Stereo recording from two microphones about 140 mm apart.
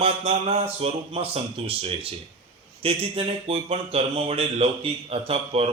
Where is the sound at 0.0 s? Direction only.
45° right (ahead or behind).